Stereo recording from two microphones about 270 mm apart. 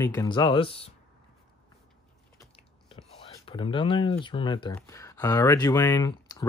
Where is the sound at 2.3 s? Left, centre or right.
Centre.